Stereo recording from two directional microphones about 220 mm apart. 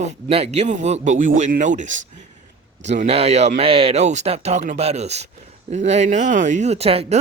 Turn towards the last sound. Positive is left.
turn(degrees=-25)  # may be behind; listen again after turning